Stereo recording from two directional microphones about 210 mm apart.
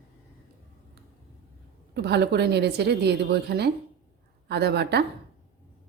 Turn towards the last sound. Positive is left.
turn(degrees=-50)  # may be behind; listen again after turning